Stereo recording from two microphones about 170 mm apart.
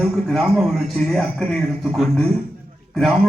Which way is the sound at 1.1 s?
Centre (ahead or behind).